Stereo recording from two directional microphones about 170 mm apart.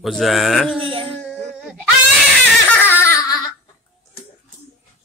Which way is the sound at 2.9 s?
15° left (ahead or behind).